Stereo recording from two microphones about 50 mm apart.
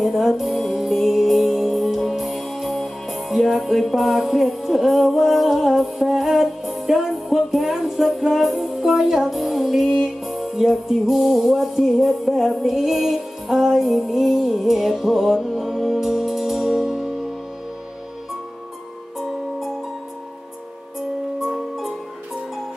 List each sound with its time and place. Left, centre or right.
0.0 s music: centre
21.4 s music: centre